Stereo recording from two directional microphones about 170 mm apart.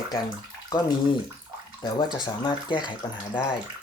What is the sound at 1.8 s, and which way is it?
Speech, 25° left (ahead or behind).